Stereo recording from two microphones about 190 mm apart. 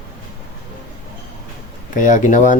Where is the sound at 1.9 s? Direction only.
40° left (ahead or behind).